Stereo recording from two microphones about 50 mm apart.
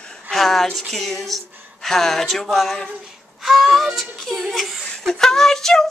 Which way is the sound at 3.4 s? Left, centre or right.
Centre.